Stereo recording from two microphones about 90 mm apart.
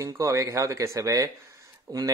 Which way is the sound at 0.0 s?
35° right (ahead or behind).